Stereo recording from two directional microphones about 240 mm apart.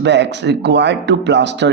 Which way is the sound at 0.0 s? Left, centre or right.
Right.